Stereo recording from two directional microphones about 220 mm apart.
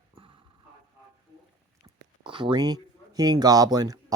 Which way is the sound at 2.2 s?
20° right (ahead or behind).